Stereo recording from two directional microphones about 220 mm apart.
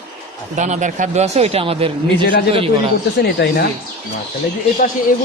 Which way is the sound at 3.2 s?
45° left (ahead or behind).